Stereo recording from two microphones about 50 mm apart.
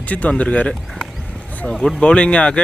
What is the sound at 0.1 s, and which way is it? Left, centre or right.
Speech, left.